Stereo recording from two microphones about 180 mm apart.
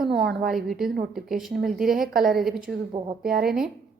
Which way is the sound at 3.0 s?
35° right (ahead or behind).